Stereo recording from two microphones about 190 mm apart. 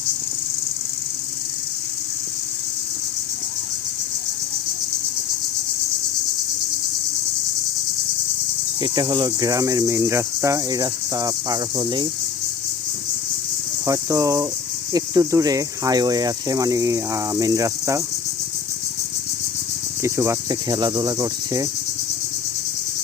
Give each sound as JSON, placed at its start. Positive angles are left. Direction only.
{"t": 8.8, "sound": "cricket", "side_deg": -20}
{"t": 13.8, "sound": "cricket", "side_deg": -15}
{"t": 20.0, "sound": "cricket", "side_deg": -15}